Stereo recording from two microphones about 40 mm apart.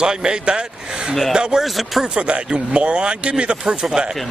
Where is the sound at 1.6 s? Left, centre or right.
Centre.